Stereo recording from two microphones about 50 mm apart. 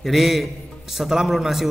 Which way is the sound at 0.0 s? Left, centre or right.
Centre.